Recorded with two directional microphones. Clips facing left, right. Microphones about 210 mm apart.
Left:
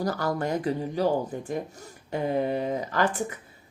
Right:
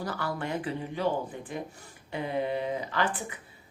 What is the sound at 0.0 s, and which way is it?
Speech, 40° left (ahead or behind).